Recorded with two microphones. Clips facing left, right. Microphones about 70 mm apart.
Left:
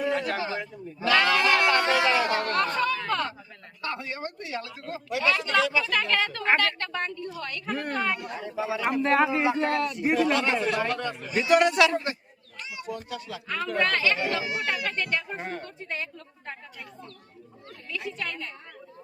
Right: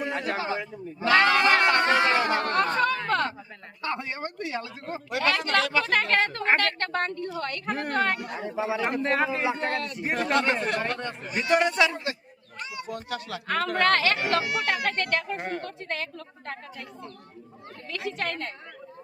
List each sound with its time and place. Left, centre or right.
0.0 s a sound: centre
0.3 s a man's voice: right
0.9 s chatter: right
3.1 s a sound: right
3.8 s a sound: right
5.1 s a woman's voice: right
6.6 s a woman's voice: right
8.4 s speech: right
8.9 s a man's voice: centre
10.0 s a man's voice: right
11.3 s a man's voice: centre
12.5 s a woman's voice: right
17.9 s a woman's voice: right